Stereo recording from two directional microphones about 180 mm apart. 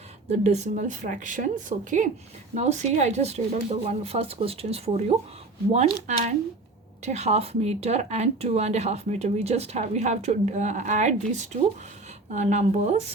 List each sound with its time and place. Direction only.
0.3 s a woman's voice: 40° right (ahead or behind)